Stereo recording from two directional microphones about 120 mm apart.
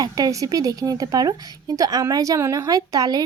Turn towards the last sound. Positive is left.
turn(degrees=-30)  # may be behind; listen again after turning